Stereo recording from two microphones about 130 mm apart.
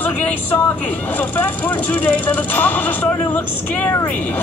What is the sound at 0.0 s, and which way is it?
Speech, 15° left (ahead or behind).